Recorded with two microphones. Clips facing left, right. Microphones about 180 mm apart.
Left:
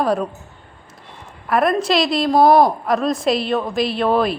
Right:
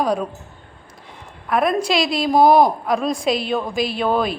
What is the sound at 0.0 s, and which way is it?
Speech, 5° left (ahead or behind).